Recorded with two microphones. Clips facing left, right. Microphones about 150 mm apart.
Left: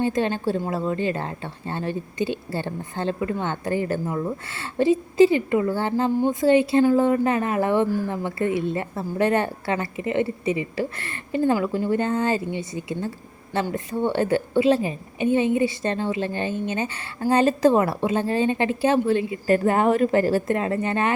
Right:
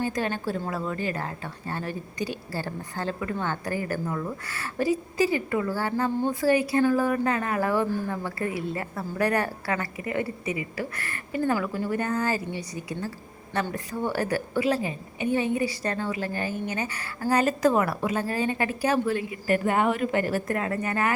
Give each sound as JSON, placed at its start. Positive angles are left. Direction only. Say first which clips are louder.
{"t": 0.0, "sound": "a woman's voice", "louder": "left 5 dB", "side_deg": 25}